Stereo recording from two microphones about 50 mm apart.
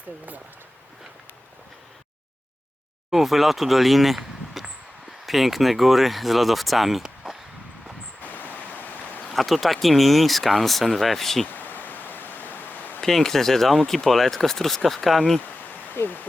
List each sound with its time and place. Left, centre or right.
3.1 s speech: centre
8.2 s a sound: left
9.3 s speech: centre
11.5 s a sound: left
13.0 s speech: centre
16.0 s speech: left